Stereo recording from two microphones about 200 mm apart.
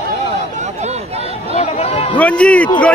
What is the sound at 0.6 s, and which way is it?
Speech, 35° right (ahead or behind).